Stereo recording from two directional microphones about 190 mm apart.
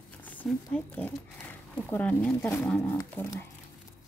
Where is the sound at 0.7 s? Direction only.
10° left (ahead or behind).